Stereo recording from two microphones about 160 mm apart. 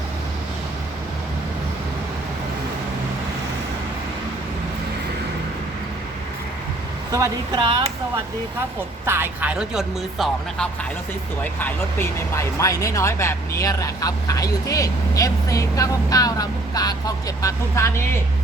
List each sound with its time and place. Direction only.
7.1 s speech: 20° right (ahead or behind)
9.0 s speech: 15° right (ahead or behind)
11.6 s speech: 15° left (ahead or behind)